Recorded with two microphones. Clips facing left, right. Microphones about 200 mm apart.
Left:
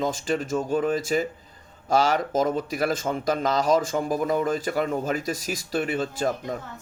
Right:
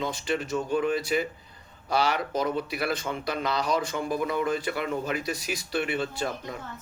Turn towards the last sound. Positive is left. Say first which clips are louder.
# left 5 dB
turn(degrees=45)  # may be behind; listen again after turning